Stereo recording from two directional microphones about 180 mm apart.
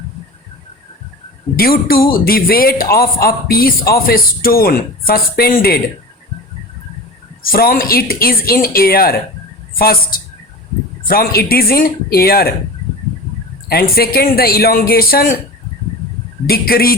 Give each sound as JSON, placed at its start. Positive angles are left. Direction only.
{"t": 1.5, "sound": "speech", "side_deg": 55}
{"t": 7.4, "sound": "speech", "side_deg": 55}
{"t": 13.9, "sound": "speech", "side_deg": 55}
{"t": 16.5, "sound": "speech", "side_deg": 55}